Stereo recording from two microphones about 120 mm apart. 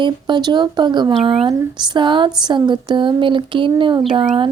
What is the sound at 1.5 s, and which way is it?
Speech, 35° right (ahead or behind).